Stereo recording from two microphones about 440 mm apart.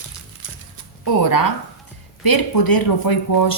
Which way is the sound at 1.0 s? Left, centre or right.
Left.